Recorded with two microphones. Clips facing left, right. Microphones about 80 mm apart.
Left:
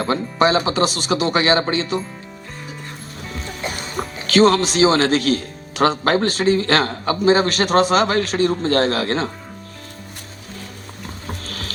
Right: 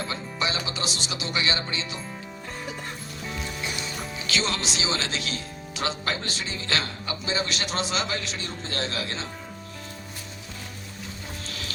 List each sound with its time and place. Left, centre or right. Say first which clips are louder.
0.0 s speech: left 12 dB; left
3.6 s speech: left 6 dB; left
11.3 s music: left 8 dB; left